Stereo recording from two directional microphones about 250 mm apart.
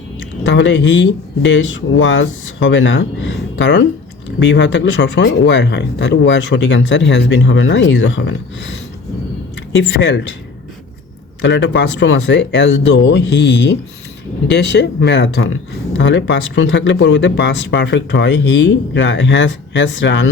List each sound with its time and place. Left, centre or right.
0.4 s speech: left
11.4 s speech: left